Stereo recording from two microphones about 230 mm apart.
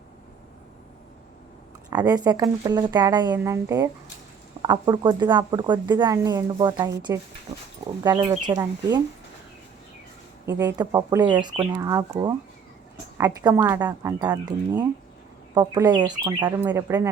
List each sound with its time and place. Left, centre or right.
1.9 s speech: centre
10.4 s speech: centre